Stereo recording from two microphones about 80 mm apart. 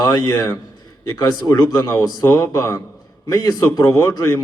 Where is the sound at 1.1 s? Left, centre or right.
Left.